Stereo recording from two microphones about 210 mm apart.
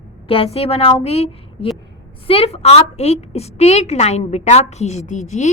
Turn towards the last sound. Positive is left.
turn(degrees=35)  # may be behind; listen again after turning